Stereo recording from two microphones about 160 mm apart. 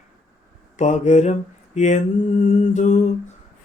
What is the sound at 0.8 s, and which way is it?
Mantra, 45° left (ahead or behind).